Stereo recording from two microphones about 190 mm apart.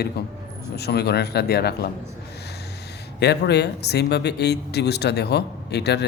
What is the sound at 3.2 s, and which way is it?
Speech, 60° left (ahead or behind).